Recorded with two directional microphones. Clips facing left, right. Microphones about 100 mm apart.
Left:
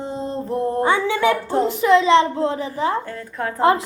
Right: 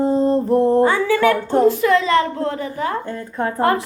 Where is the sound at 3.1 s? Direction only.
25° right (ahead or behind).